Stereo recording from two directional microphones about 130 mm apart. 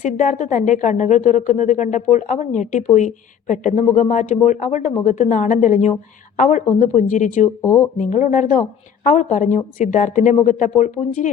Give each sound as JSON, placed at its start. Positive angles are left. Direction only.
{"t": 0.0, "sound": "a woman's voice", "side_deg": 70}
{"t": 7.6, "sound": "speech", "side_deg": 20}
{"t": 7.9, "sound": "a woman's voice", "side_deg": 70}